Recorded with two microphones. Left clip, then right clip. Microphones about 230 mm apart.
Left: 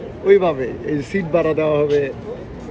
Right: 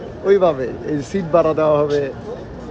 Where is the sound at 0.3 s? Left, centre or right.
Centre.